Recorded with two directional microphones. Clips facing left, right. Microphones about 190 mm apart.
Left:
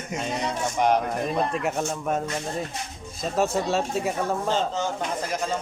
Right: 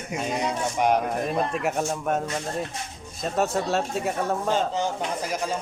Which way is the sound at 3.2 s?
Centre (ahead or behind).